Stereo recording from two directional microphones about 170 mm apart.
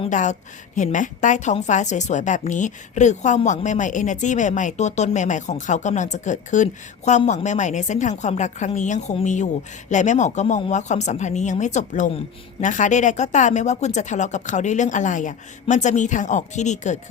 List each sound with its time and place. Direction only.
0.1 s a woman's voice: 45° left (ahead or behind)